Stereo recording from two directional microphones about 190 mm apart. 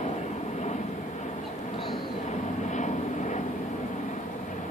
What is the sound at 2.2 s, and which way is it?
Vehicle, 40° left (ahead or behind).